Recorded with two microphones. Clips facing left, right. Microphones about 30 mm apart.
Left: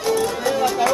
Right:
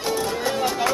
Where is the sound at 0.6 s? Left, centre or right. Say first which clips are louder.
Left 4 dB; centre.